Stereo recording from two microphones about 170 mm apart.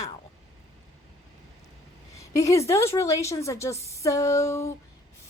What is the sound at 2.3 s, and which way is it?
A woman's voice, 20° left (ahead or behind).